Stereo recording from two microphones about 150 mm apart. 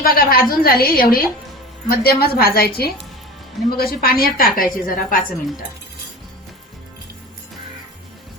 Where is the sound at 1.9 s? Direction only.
90° left.